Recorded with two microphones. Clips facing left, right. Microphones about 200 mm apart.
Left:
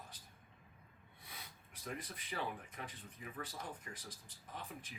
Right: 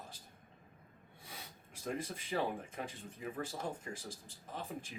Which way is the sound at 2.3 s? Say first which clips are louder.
Right 7 dB; 40° right (ahead or behind).